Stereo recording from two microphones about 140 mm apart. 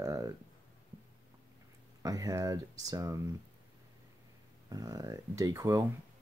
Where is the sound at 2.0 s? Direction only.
25° right (ahead or behind).